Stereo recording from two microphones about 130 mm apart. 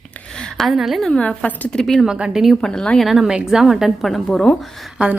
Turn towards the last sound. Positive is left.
turn(degrees=-5)  # may be behind; listen again after turning